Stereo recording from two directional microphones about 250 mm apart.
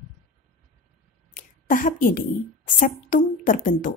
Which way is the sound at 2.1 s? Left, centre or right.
Left.